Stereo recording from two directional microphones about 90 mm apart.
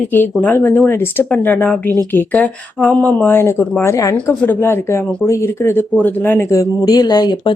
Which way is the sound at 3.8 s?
40° left (ahead or behind).